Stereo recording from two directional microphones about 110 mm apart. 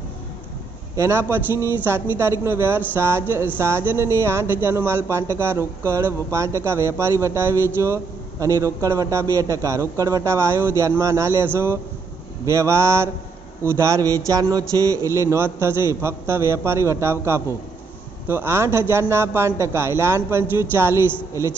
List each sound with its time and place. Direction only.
0.9 s a man's voice: 25° right (ahead or behind)